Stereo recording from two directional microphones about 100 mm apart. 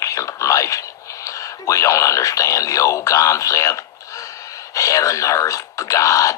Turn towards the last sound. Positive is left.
turn(degrees=35)  # may be behind; listen again after turning